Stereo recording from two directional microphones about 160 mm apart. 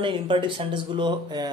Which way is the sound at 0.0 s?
30° right (ahead or behind).